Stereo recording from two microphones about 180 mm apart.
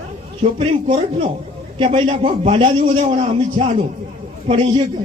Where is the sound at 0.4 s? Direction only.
30° right (ahead or behind).